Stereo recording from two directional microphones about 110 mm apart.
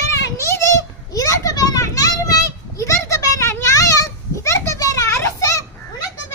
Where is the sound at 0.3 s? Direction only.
25° left (ahead or behind).